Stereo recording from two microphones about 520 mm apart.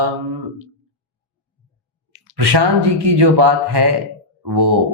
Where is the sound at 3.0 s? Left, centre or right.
Right.